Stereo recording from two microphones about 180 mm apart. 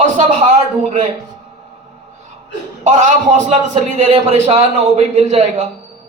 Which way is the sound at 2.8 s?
40° right (ahead or behind).